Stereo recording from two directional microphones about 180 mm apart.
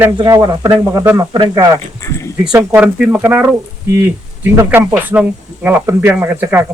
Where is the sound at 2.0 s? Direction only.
15° left (ahead or behind).